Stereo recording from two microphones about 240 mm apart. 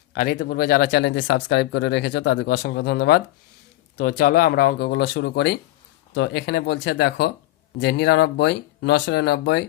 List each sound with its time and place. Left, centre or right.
0.1 s speech: left
4.2 s speech: left